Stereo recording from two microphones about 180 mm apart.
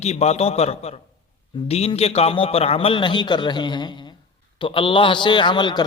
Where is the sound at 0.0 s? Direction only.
35° left (ahead or behind).